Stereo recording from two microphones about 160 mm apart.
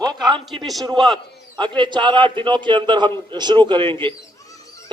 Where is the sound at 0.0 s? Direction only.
25° right (ahead or behind).